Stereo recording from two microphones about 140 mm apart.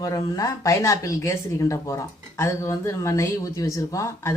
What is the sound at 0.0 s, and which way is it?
Speech, 25° left (ahead or behind).